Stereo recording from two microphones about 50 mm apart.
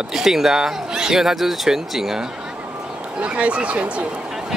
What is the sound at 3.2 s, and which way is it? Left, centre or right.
Speech, right.